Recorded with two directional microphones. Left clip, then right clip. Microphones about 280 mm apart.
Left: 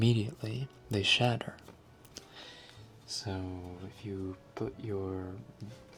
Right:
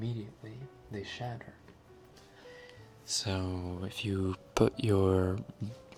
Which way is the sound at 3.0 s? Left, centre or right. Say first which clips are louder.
Right 4 dB; right.